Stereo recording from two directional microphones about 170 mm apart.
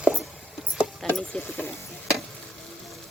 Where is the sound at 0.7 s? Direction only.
Centre (ahead or behind).